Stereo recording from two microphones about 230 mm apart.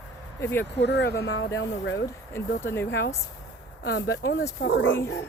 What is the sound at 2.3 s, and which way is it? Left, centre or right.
Speech, centre.